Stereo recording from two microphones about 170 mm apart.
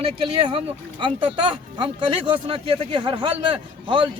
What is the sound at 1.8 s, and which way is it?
A man's voice, 30° right (ahead or behind).